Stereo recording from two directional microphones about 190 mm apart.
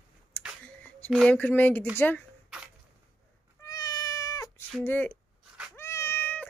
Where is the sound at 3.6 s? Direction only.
20° left (ahead or behind).